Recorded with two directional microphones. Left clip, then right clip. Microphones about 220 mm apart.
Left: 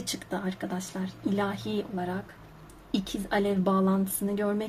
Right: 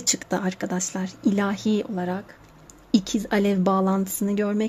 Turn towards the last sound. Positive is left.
turn(degrees=-40)  # may be behind; listen again after turning